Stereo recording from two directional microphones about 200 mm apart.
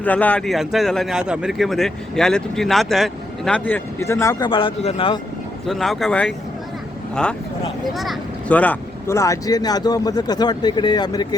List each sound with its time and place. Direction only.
0.0 s speech: 10° left (ahead or behind); by 5.2 s 25° left (ahead or behind)
5.6 s speech: centre (ahead or behind)
7.9 s speech: centre (ahead or behind); by 11.3 s 20° left (ahead or behind)